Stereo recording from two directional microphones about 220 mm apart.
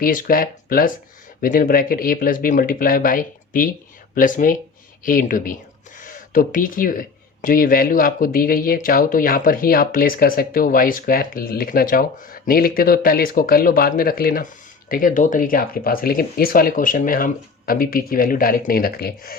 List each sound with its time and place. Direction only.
0.0 s speech: 40° left (ahead or behind)